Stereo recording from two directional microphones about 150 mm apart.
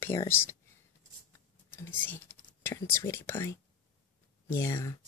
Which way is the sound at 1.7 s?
15° left (ahead or behind).